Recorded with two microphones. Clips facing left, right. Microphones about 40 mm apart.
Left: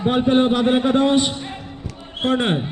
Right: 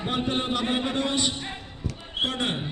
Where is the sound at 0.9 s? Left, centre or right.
Left.